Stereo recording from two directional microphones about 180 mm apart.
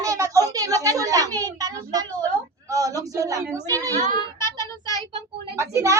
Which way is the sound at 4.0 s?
45° right (ahead or behind).